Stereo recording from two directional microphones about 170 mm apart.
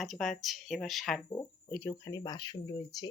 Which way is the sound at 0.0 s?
Centre (ahead or behind).